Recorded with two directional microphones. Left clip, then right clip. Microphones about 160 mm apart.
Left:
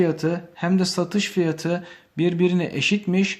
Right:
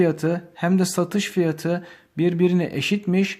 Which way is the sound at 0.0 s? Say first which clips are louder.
Right 1 dB; 30° right (ahead or behind).